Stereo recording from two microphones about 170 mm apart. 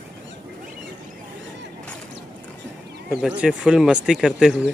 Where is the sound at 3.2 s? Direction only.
5° right (ahead or behind).